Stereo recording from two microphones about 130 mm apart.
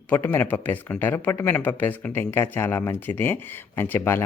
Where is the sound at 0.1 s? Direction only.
15° left (ahead or behind).